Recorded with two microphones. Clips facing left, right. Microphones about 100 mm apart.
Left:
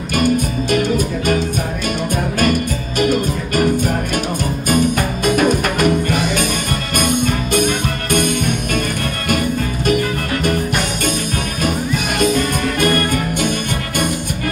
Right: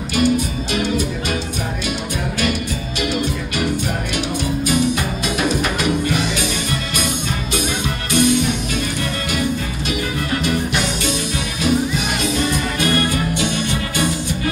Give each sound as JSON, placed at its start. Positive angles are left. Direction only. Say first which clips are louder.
{"t": 0.1, "sound": "music", "louder": "left 1 dB", "side_deg": 50}
{"t": 2.4, "sound": "music", "louder": "left 5 dB", "side_deg": 45}
{"t": 4.6, "sound": "music", "louder": "left 4 dB", "side_deg": 50}